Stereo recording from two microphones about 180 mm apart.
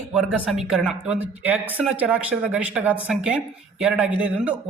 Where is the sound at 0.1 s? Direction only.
5° right (ahead or behind).